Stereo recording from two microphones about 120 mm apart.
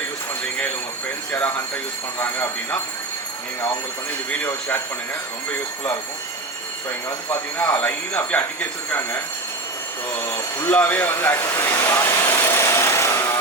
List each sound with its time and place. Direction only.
2.1 s speech: 20° left (ahead or behind)
4.3 s speech: 15° left (ahead or behind)
7.3 s speech: 15° left (ahead or behind)
10.3 s speech: 15° left (ahead or behind)